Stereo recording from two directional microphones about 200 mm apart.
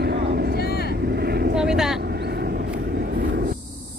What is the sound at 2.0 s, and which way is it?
Vehicle, 55° right (ahead or behind).